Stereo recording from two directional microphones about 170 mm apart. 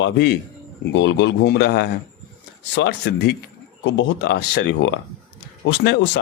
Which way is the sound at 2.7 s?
85° left.